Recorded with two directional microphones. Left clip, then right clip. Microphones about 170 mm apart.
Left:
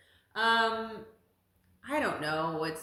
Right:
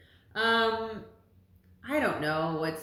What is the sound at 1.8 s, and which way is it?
A woman's voice, 25° left (ahead or behind).